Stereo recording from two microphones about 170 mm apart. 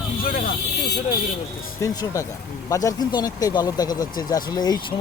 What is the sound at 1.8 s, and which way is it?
Speech, 20° left (ahead or behind).